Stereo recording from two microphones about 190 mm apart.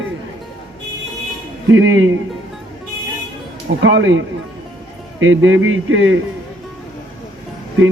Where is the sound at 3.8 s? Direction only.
80° right.